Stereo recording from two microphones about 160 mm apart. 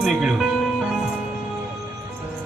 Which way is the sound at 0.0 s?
Centre (ahead or behind).